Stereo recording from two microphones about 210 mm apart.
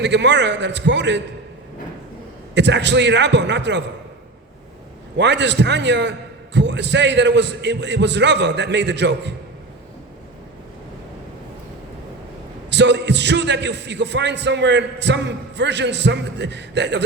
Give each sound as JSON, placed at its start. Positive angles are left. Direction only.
{"t": 0.0, "sound": "speech", "side_deg": -55}
{"t": 2.6, "sound": "speech", "side_deg": -55}
{"t": 5.1, "sound": "speech", "side_deg": -55}
{"t": 12.7, "sound": "speech", "side_deg": -55}